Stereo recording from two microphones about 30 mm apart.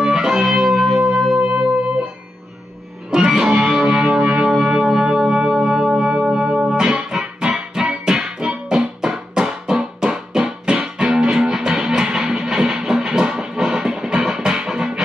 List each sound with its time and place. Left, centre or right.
0.0 s music: right
1.4 s music: right
3.1 s music: right
4.7 s music: centre
5.9 s music: right
7.1 s music: centre